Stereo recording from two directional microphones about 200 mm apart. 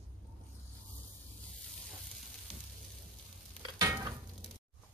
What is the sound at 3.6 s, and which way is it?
Stir, 20° right (ahead or behind).